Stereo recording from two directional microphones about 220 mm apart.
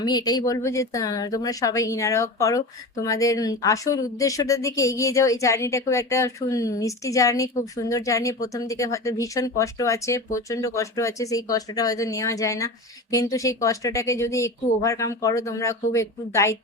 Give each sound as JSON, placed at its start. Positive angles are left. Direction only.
{"t": 0.0, "sound": "speech", "side_deg": 20}